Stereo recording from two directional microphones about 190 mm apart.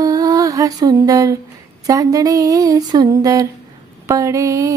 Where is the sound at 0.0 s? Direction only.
20° right (ahead or behind).